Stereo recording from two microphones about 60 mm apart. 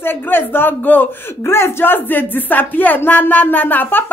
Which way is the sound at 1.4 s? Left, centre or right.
Left.